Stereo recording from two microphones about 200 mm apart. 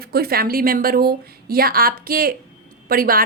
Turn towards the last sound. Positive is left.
turn(degrees=-45)  # may be behind; listen again after turning